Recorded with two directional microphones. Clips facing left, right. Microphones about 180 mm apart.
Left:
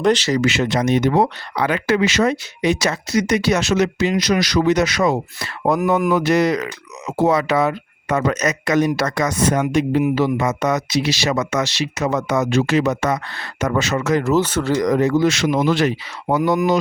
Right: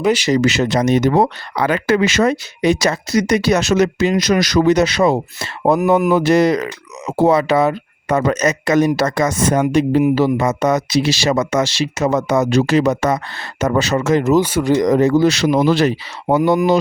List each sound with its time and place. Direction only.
0.0 s speech: 10° right (ahead or behind)
0.4 s speech: 40° right (ahead or behind)
4.7 s speech: 30° right (ahead or behind)